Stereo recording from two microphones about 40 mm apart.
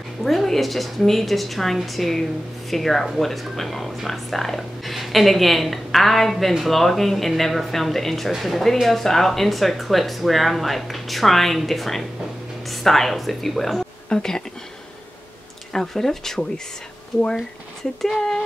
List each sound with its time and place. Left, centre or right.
0.2 s speech: centre
14.0 s speech: centre
15.7 s speech: centre
18.0 s speech: centre